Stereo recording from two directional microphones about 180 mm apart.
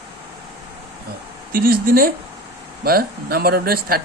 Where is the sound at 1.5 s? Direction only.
55° right (ahead or behind).